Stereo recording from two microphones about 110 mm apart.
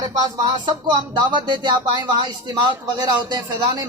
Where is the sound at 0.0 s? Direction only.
35° right (ahead or behind).